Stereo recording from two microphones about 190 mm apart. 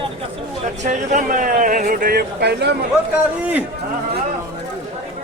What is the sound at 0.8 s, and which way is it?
Speech, 40° right (ahead or behind).